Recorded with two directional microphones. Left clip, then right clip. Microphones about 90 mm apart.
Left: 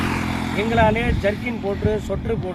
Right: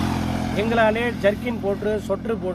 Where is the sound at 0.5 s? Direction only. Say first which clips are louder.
Left 1 dB; 20° right (ahead or behind).